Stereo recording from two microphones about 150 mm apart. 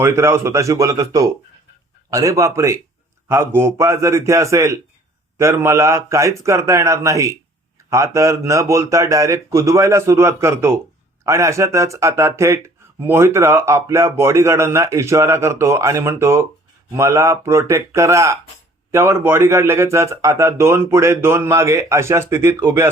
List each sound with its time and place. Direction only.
0.0 s a man's voice: 15° right (ahead or behind)